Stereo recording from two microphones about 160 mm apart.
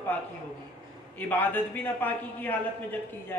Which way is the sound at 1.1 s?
10° left (ahead or behind).